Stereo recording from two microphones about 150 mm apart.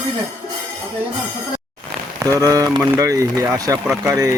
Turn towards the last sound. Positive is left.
turn(degrees=-20)  # may be behind; listen again after turning